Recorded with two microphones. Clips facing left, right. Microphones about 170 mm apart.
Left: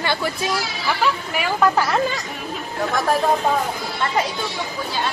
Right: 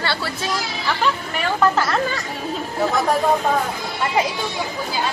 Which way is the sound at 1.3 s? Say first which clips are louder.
Left 1 dB; 15° left (ahead or behind).